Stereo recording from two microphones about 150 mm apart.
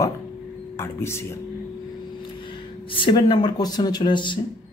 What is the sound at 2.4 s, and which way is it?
Speech, 35° left (ahead or behind).